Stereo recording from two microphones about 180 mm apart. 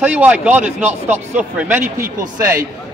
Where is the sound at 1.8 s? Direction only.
50° right (ahead or behind).